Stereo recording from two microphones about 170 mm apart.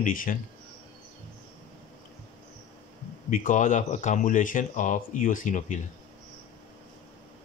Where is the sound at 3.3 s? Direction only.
50° left (ahead or behind).